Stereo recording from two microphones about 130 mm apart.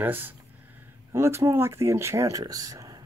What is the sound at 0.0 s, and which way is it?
Speech, 15° right (ahead or behind).